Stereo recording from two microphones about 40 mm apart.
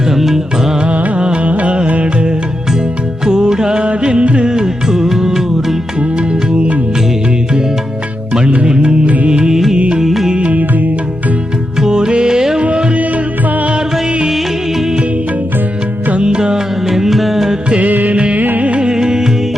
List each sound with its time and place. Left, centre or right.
0.1 s music: centre
0.9 s music: right
3.2 s music: centre
6.0 s music: right
8.3 s music: right
10.0 s music: centre
10.4 s music: right
11.8 s music: centre
12.6 s music: right
14.3 s music: centre
16.1 s music: right
16.8 s music: centre
17.7 s music: right
18.9 s music: centre